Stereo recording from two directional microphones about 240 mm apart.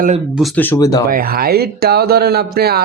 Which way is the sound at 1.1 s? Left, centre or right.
Right.